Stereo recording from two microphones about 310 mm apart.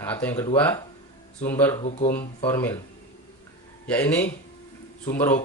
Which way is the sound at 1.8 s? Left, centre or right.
Left.